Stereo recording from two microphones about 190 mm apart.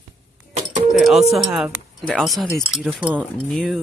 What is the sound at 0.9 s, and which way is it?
Speech, centre (ahead or behind).